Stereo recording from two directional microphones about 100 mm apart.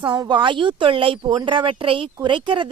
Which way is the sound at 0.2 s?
45° right (ahead or behind).